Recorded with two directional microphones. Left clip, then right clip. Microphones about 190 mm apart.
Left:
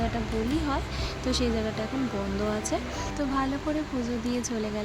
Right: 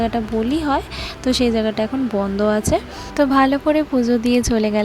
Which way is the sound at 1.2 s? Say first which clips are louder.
Right 11 dB; 40° right (ahead or behind).